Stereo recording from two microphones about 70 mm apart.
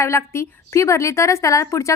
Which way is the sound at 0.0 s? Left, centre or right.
Left.